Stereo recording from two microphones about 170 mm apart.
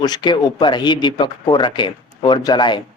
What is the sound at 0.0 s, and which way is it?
Speech, 25° left (ahead or behind).